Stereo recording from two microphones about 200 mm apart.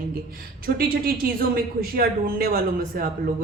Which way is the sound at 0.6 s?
45° right (ahead or behind).